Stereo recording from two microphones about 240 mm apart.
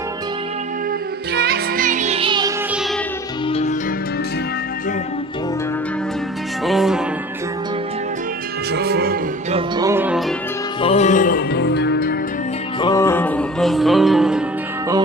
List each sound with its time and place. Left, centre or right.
1.3 s music: right; by 2.5 s centre
3.4 s music: left
6.6 s music: centre
8.7 s music: right
9.5 s music: centre
10.8 s music: left
12.8 s music: centre